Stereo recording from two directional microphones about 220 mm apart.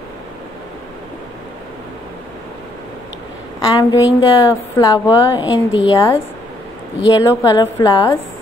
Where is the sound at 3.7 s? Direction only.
20° left (ahead or behind).